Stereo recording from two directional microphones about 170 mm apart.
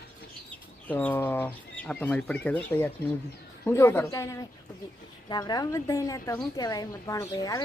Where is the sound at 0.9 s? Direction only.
10° left (ahead or behind).